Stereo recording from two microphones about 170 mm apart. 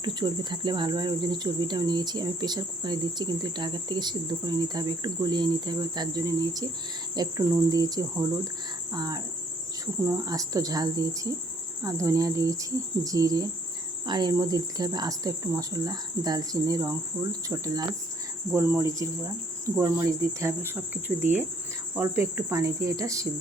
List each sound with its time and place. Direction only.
0.0 s speech: 25° right (ahead or behind)